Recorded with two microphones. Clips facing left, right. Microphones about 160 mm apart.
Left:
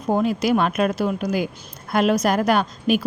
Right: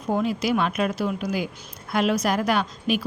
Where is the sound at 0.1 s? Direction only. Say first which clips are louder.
Left 4 dB; 50° left (ahead or behind).